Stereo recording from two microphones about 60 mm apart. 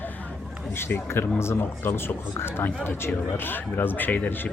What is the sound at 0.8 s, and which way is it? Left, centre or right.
Speech, left.